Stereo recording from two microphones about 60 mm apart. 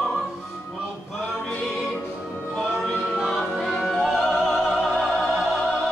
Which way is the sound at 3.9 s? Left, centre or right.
Centre.